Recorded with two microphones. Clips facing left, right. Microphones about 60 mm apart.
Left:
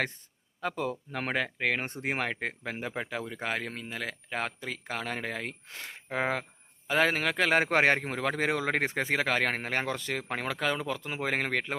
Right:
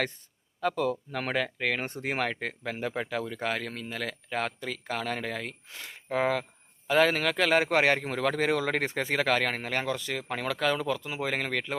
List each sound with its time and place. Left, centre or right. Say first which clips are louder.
0.8 s a man's voice: right 4 dB; left